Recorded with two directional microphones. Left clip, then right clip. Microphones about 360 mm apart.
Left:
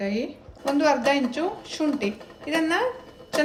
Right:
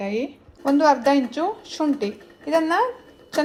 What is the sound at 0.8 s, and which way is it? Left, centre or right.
A woman's voice, centre.